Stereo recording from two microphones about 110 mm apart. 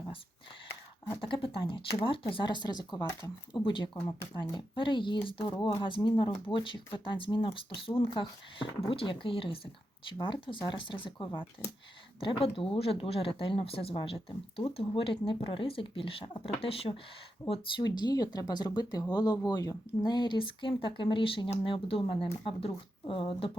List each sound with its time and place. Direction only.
1.2 s speech: 50° left (ahead or behind)
17.5 s speech: 45° left (ahead or behind)